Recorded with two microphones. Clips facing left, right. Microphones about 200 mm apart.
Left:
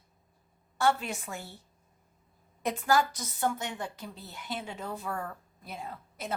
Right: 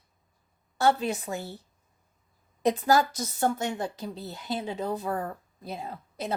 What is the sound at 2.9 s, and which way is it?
A woman's voice, 40° right (ahead or behind).